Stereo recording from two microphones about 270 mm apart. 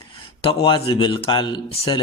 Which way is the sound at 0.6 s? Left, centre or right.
Centre.